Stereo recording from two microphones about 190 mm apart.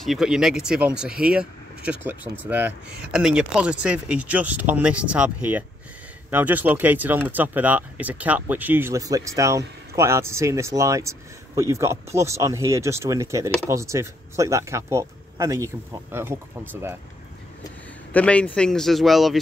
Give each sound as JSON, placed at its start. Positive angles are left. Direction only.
{"t": 0.0, "sound": "speech", "side_deg": 0}
{"t": 18.1, "sound": "speech", "side_deg": 5}